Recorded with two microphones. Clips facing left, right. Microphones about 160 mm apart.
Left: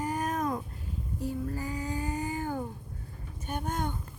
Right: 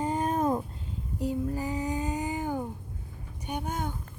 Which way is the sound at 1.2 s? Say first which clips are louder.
Right 4 dB; 15° right (ahead or behind).